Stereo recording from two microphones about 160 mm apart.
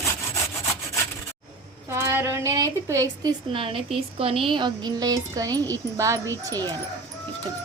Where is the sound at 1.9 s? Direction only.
15° right (ahead or behind).